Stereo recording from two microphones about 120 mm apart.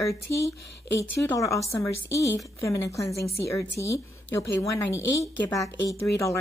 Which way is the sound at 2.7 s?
25° left (ahead or behind).